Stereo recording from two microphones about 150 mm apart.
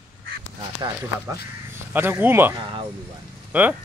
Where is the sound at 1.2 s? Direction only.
15° right (ahead or behind).